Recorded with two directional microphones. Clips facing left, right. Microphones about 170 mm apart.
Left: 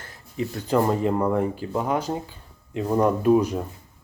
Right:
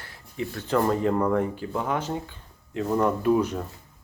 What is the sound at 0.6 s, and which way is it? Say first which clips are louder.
Speech: left 1 dB; 20° left (ahead or behind).